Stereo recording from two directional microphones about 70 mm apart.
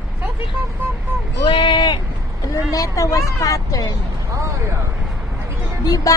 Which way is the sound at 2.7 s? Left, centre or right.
Left.